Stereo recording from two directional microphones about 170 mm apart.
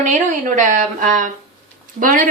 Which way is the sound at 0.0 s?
45° right (ahead or behind).